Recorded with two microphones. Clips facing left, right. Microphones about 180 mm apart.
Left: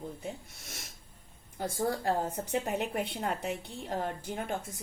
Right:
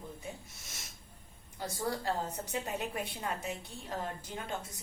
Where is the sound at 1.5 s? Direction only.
50° left (ahead or behind).